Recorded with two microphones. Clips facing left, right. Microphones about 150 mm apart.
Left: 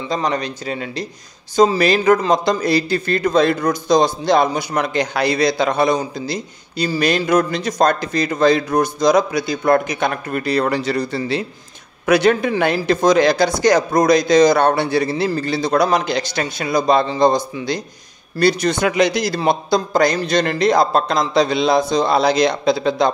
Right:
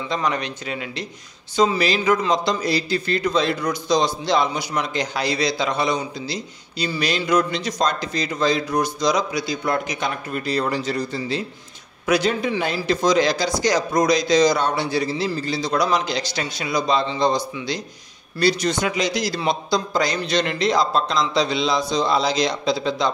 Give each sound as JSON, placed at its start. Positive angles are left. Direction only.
{"t": 0.1, "sound": "speech", "side_deg": 35}
{"t": 1.6, "sound": "a man's voice", "side_deg": 45}